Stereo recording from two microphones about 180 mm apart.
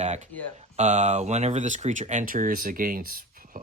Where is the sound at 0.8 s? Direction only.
40° right (ahead or behind).